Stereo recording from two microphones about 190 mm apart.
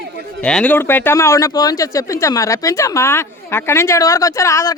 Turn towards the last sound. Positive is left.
turn(degrees=15)  # may be behind; listen again after turning